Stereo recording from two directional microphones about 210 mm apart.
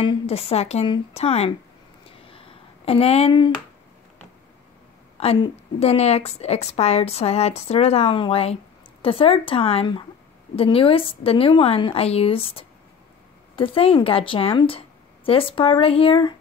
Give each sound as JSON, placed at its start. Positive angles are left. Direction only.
{"t": 0.0, "sound": "a woman's voice", "side_deg": 25}
{"t": 2.0, "sound": "a sound", "side_deg": 25}
{"t": 5.1, "sound": "a woman's voice", "side_deg": 30}